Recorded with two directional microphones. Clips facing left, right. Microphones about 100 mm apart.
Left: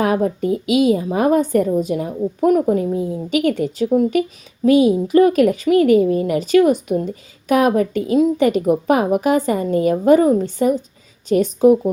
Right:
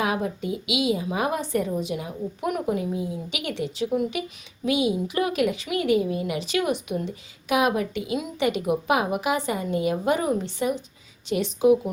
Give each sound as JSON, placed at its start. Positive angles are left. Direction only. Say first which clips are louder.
{"t": 0.0, "sound": "a woman's voice", "louder": "left 8 dB", "side_deg": 45}